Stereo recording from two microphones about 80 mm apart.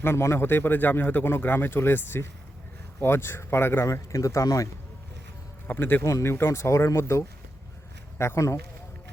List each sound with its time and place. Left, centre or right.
0.0 s speech: left
3.8 s speech: left
5.6 s speech: left
6.1 s speech: left